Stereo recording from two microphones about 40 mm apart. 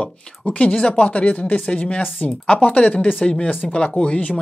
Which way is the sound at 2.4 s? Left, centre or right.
Left.